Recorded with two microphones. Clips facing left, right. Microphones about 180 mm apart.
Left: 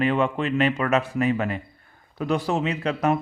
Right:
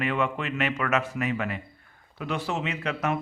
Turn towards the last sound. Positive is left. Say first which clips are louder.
# left 5 dB
turn(degrees=35)  # may be behind; listen again after turning